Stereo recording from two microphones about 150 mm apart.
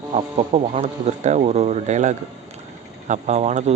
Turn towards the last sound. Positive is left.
turn(degrees=-50)  # may be behind; listen again after turning